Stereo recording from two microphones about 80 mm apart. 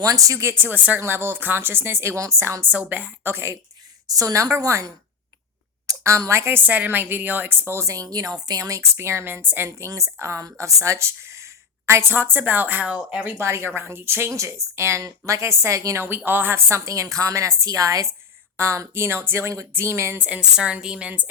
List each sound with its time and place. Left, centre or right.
0.0 s a woman's voice: right
2.6 s speech: right
4.0 s a woman's voice: right
6.6 s a woman's voice: right
10.8 s a sound: right
12.1 s speech: right
13.3 s a woman's voice: right
16.0 s a woman's voice: right
20.1 s a woman's voice: centre